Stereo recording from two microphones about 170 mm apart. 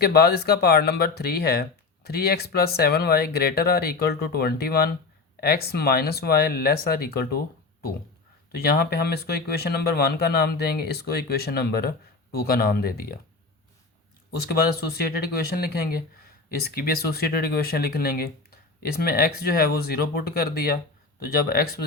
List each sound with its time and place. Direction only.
0.0 s speech: 70° left (ahead or behind)
14.9 s speech: 65° left (ahead or behind)